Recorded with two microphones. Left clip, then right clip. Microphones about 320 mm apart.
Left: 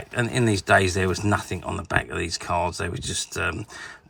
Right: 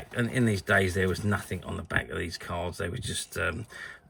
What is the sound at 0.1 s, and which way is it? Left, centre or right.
Speech, centre.